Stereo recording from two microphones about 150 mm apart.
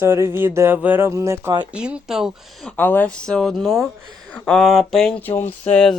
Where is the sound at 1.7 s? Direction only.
5° right (ahead or behind).